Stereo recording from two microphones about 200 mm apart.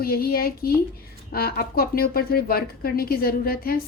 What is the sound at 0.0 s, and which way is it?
A woman's voice, 50° left (ahead or behind).